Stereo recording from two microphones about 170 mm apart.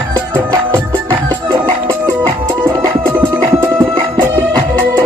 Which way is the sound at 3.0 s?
15° right (ahead or behind).